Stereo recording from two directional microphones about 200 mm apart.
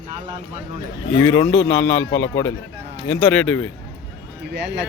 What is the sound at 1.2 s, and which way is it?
A man's voice, 10° left (ahead or behind).